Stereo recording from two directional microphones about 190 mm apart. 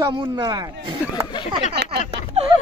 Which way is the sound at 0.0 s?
20° right (ahead or behind).